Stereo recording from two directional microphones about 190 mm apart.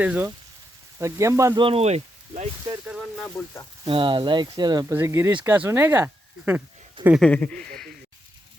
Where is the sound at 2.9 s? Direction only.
5° left (ahead or behind).